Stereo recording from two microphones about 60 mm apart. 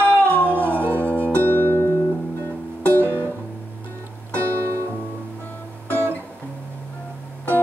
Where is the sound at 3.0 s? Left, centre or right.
Right.